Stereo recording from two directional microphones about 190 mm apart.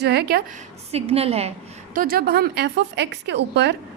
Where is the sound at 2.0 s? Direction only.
50° right (ahead or behind).